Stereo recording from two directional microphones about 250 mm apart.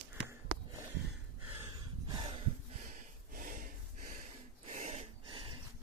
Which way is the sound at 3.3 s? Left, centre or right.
Right.